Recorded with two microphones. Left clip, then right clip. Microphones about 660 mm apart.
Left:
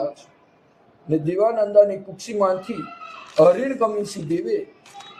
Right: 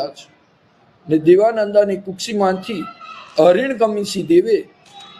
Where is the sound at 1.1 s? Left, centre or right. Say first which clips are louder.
Right 7 dB; right.